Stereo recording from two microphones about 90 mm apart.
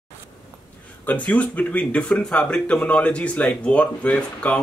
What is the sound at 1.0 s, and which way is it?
Speech, 15° left (ahead or behind).